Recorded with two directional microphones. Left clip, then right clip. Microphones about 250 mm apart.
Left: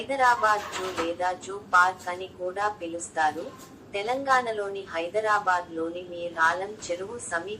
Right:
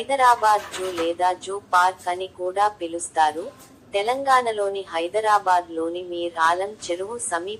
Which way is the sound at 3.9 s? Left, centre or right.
Right.